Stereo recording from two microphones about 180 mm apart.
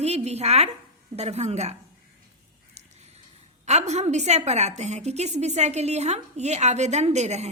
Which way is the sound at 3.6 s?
40° right (ahead or behind).